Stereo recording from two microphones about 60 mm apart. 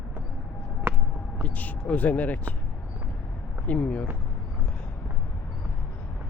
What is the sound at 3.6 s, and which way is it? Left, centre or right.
Speech, left.